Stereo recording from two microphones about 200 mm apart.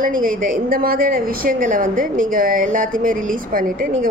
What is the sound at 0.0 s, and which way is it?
A woman's voice, 45° right (ahead or behind).